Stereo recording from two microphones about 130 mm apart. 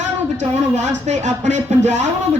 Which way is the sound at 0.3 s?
65° right (ahead or behind).